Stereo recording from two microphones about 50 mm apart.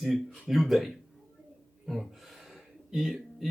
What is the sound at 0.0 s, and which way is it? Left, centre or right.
Speech, centre.